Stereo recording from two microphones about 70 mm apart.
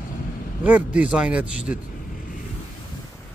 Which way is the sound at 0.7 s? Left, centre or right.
Right.